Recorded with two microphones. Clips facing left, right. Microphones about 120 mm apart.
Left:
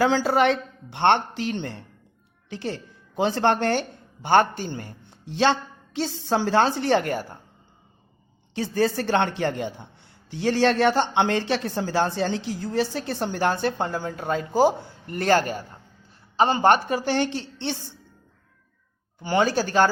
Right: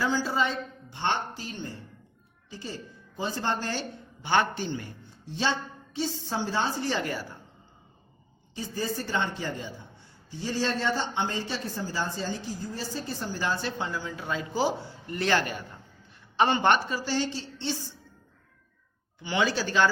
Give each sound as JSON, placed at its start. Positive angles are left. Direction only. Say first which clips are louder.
{"t": 0.0, "sound": "a man's voice", "louder": "left 7 dB", "side_deg": 75}
{"t": 5.2, "sound": "a man's voice", "louder": "left 8 dB", "side_deg": 75}
{"t": 8.5, "sound": "a man's voice", "louder": "left 9 dB", "side_deg": 75}
{"t": 19.2, "sound": "a woman's voice", "louder": "left 5 dB", "side_deg": 45}